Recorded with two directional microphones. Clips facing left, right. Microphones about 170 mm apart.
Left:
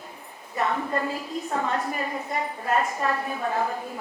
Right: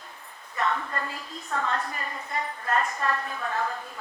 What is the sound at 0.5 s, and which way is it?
A woman's voice, 20° left (ahead or behind).